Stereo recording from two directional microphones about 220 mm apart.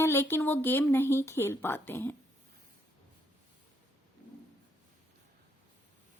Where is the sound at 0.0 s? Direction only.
10° left (ahead or behind).